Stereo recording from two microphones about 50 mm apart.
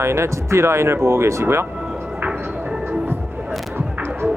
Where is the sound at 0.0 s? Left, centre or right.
Right.